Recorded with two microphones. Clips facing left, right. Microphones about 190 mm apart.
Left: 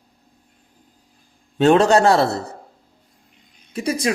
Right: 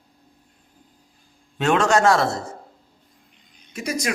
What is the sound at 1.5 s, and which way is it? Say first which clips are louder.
Speech: left 5 dB; 35° left (ahead or behind).